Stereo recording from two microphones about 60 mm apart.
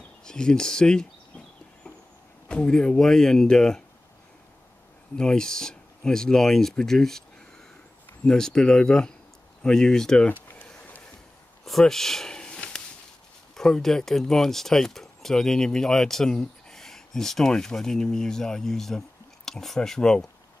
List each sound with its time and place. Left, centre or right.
0.2 s speech: centre
2.4 s speech: centre
5.1 s speech: centre
8.3 s speech: centre
10.2 s a sound: left
11.8 s a sound: centre
13.6 s speech: centre